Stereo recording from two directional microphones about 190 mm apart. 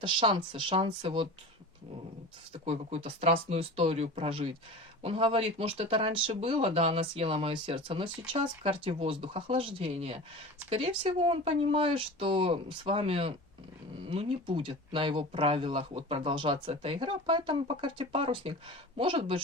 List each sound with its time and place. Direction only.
0.0 s speech: 25° right (ahead or behind)
2.5 s speech: 30° right (ahead or behind)